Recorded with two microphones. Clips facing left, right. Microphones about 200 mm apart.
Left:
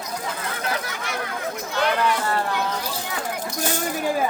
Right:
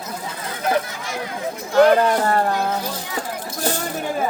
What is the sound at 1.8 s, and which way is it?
Speech, 45° right (ahead or behind).